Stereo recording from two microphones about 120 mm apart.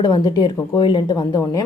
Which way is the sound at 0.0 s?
35° left (ahead or behind).